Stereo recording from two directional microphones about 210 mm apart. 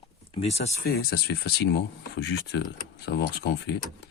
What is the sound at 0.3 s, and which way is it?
Speech, 30° left (ahead or behind).